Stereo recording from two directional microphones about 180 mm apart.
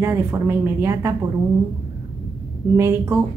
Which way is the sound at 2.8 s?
15° right (ahead or behind).